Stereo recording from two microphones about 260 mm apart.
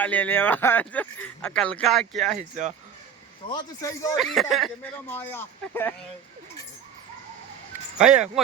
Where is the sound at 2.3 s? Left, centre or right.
Right.